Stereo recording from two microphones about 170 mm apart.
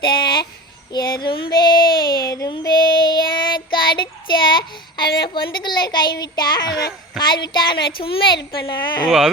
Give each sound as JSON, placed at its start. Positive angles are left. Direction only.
{"t": 0.0, "sound": "a sound", "side_deg": 25}
{"t": 0.9, "sound": "child singing", "side_deg": 25}
{"t": 5.3, "sound": "speech", "side_deg": 25}
{"t": 9.0, "sound": "speech", "side_deg": 0}